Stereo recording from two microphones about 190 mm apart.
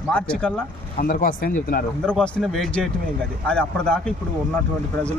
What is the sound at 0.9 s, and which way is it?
Speech, 45° left (ahead or behind).